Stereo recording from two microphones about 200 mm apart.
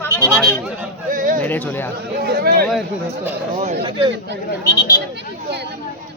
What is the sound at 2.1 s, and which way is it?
Chatter, 55° right (ahead or behind).